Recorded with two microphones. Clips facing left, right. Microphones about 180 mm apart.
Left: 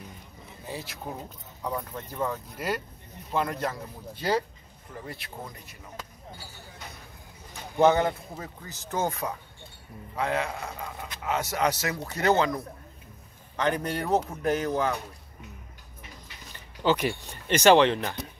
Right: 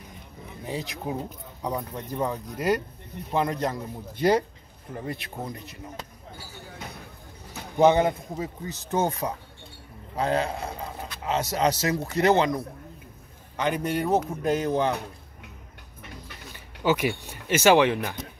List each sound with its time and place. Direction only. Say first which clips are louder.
0.7 s speech: right 5 dB; 15° right (ahead or behind)
7.7 s speech: right 2 dB; 15° right (ahead or behind)
10.1 s speech: right 3 dB; 35° right (ahead or behind)
11.2 s speech: right 2 dB; 20° right (ahead or behind)
16.0 s a sound: right 5 dB; 60° right (ahead or behind)
16.5 s a sound: right 1 dB; 10° right (ahead or behind)
17.5 s speech: even; 5° right (ahead or behind)